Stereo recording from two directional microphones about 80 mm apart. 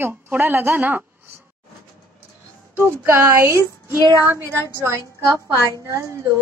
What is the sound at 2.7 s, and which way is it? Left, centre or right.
Speech, right.